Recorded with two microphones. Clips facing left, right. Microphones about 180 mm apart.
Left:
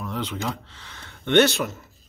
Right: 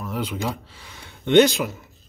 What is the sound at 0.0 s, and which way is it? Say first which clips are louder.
Speech: right 2 dB; 10° right (ahead or behind).